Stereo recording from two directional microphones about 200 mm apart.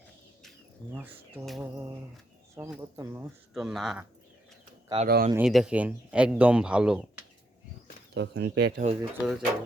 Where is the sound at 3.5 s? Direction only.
Centre (ahead or behind).